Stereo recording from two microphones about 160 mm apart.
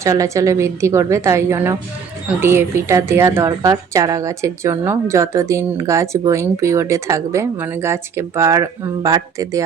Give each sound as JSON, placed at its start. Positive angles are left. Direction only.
{"t": 0.0, "sound": "a woman's voice", "side_deg": -20}